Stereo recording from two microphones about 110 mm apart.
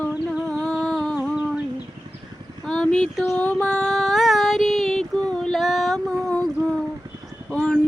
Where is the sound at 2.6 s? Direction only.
5° left (ahead or behind).